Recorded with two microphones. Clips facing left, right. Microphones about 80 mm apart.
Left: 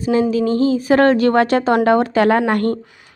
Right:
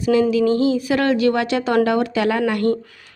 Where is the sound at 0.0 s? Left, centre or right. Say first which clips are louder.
Even; left.